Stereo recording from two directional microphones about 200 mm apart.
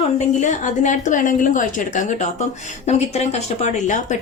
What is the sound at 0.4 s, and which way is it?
A woman's voice, 35° left (ahead or behind).